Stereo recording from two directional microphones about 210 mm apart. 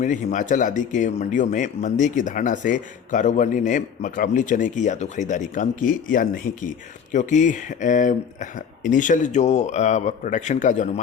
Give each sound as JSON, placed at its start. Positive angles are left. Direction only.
{"t": 0.0, "sound": "speech", "side_deg": 35}